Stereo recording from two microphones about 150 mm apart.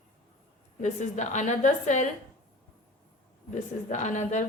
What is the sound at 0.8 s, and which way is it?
A woman's voice, 50° left (ahead or behind).